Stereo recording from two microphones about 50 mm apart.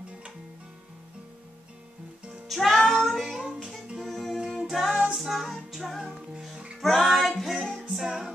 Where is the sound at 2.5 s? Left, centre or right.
Centre.